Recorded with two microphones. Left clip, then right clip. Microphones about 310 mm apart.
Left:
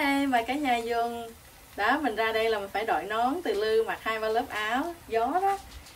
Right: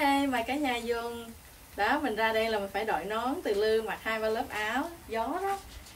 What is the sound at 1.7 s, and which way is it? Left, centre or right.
Speech, centre.